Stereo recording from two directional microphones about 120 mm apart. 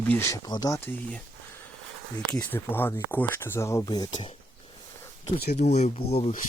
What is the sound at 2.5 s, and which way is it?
Speech, 20° left (ahead or behind).